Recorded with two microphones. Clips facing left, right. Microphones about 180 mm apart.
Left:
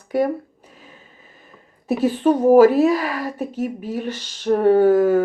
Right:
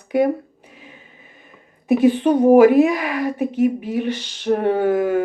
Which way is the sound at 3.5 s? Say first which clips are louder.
Right 6 dB; 40° left (ahead or behind).